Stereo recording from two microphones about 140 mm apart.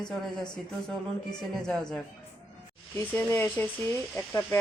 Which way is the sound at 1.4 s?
5° left (ahead or behind).